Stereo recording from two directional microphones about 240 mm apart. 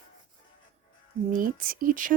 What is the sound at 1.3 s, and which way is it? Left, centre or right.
Speech, right.